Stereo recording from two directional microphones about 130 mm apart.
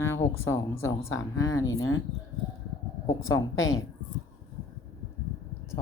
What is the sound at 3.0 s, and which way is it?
Speech, 25° left (ahead or behind).